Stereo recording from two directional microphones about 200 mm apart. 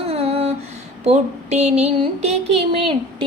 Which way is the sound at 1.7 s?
30° right (ahead or behind).